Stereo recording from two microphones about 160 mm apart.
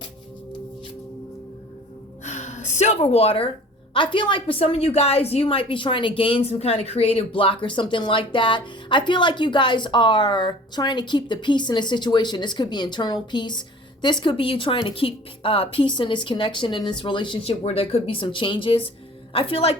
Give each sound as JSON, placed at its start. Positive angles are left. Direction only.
{"t": 2.2, "sound": "gasp", "side_deg": 45}
{"t": 3.9, "sound": "a woman's voice", "side_deg": 30}